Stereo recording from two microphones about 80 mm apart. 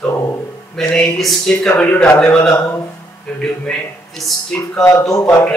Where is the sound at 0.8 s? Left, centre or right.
Centre.